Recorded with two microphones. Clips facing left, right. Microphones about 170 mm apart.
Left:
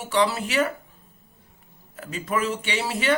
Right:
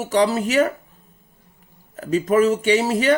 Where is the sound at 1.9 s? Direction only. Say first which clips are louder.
Right 10 dB; 40° right (ahead or behind).